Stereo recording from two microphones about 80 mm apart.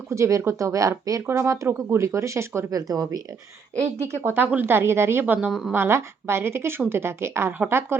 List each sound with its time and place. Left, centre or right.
0.1 s speech: right
1.4 s speech: right
4.4 s speech: right
5.2 s a woman's voice: right
5.5 s speech: centre
5.7 s speech: right